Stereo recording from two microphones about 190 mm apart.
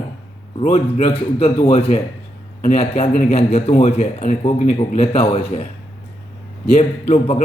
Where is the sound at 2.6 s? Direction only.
35° left (ahead or behind).